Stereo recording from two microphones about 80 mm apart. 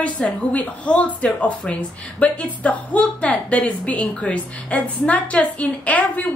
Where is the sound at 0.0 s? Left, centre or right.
Centre.